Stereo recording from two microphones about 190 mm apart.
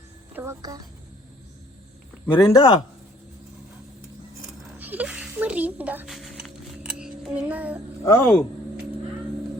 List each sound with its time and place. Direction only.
0.3 s a woman's voice: 15° right (ahead or behind)
2.2 s speech: 10° left (ahead or behind)
4.4 s a sound: 10° right (ahead or behind)
8.0 s speech: 10° left (ahead or behind)